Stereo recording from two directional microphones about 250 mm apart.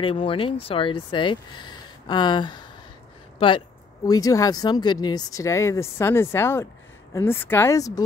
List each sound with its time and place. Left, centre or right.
0.0 s speech: left